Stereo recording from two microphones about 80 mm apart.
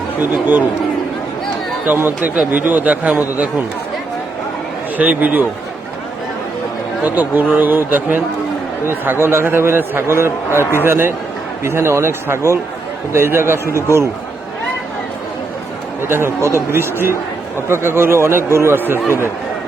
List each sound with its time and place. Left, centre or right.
0.2 s a man's voice: right
1.9 s a man's voice: right
4.9 s a man's voice: centre
7.0 s a man's voice: right
16.0 s speech: right
16.4 s speech: left
16.7 s a man's voice: right